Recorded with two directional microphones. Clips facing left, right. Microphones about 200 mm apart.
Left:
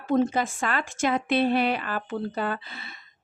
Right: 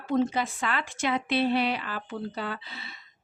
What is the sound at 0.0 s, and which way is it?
Speech, 50° left (ahead or behind).